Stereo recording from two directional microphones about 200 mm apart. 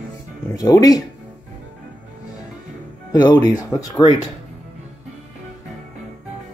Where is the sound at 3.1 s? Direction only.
20° left (ahead or behind).